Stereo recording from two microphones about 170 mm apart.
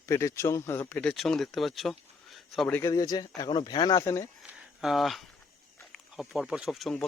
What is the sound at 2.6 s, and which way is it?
Speech, 15° left (ahead or behind).